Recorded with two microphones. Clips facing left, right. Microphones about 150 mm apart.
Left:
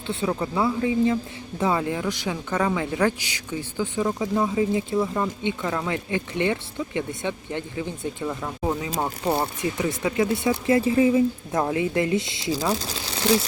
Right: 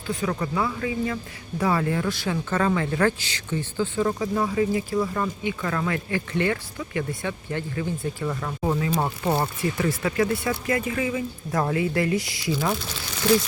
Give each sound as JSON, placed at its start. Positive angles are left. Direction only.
{"t": 0.3, "sound": "speech", "side_deg": 20}
{"t": 9.6, "sound": "speech", "side_deg": 20}
{"t": 12.5, "sound": "speech", "side_deg": 35}